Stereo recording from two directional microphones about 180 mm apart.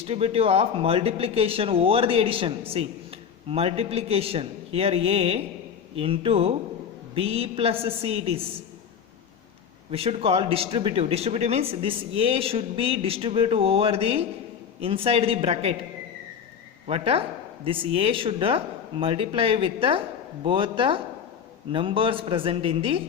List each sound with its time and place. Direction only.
0.0 s speech: 30° right (ahead or behind)
9.9 s speech: 30° right (ahead or behind)
16.8 s speech: 30° right (ahead or behind)